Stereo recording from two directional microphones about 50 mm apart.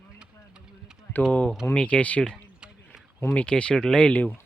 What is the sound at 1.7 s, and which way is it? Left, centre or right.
Speech, left.